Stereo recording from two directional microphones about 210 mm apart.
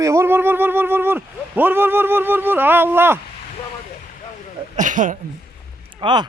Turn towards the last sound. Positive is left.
turn(degrees=-20)  # may be behind; listen again after turning